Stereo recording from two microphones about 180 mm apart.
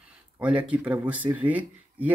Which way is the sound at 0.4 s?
5° right (ahead or behind).